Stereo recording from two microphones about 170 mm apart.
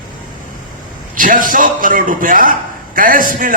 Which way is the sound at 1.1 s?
50° right (ahead or behind).